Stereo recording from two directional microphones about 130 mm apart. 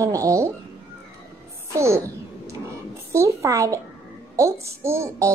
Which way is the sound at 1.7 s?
20° right (ahead or behind).